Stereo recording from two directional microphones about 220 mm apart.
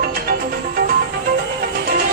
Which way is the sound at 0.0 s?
45° right (ahead or behind).